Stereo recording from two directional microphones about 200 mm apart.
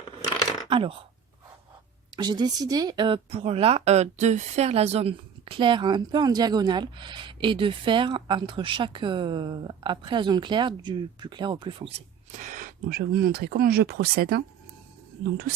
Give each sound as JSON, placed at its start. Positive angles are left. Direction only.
{"t": 0.7, "sound": "speech", "side_deg": -25}
{"t": 2.1, "sound": "speech", "side_deg": -20}